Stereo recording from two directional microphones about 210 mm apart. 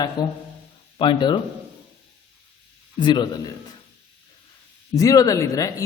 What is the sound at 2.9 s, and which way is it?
Speech, 20° left (ahead or behind).